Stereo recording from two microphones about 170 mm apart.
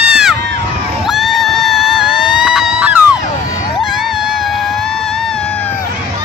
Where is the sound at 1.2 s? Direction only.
Centre (ahead or behind).